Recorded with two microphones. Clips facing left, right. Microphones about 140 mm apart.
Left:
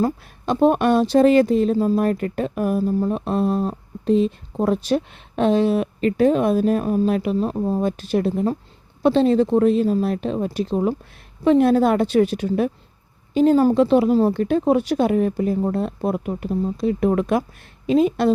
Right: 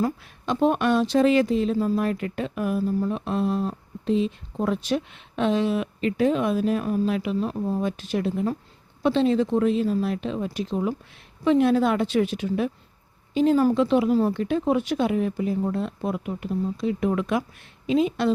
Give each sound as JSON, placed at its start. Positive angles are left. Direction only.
{"t": 0.0, "sound": "speech", "side_deg": 40}